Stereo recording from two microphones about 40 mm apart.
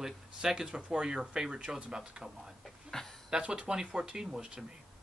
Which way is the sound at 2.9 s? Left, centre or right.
Centre.